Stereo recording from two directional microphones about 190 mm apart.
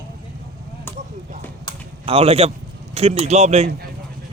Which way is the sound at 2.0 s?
30° right (ahead or behind).